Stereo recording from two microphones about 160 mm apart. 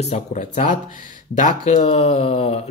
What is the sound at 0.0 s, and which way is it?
Speech, 45° left (ahead or behind).